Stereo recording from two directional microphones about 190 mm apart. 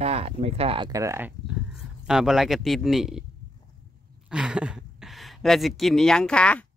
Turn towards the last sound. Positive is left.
turn(degrees=5)  # may be behind; listen again after turning